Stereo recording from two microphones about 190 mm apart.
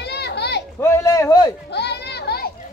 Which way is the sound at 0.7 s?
15° left (ahead or behind).